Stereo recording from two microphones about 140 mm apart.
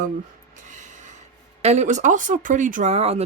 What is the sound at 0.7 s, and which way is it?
Snort, 60° right (ahead or behind).